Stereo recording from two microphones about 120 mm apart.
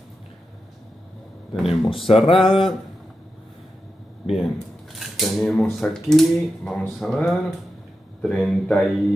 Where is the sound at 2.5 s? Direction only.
Centre (ahead or behind).